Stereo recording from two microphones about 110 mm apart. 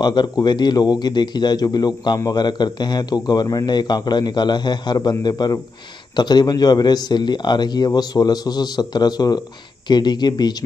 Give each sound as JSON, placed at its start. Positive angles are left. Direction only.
{"t": 0.0, "sound": "speech", "side_deg": 40}